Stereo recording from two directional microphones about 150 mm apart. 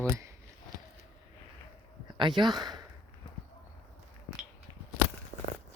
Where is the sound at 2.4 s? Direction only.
30° right (ahead or behind).